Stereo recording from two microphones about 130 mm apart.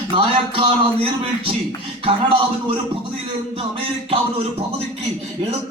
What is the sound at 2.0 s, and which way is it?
Music, 45° right (ahead or behind).